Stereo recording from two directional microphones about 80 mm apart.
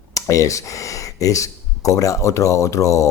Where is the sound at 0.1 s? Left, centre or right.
Left.